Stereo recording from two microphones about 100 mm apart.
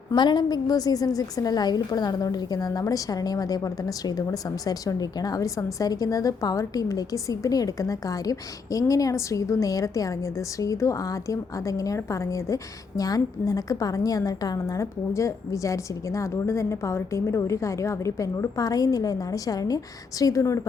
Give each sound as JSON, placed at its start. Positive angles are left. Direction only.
{"t": 0.1, "sound": "a woman's voice", "side_deg": 50}